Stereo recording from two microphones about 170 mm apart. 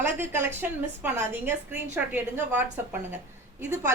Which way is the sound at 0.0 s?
15° right (ahead or behind).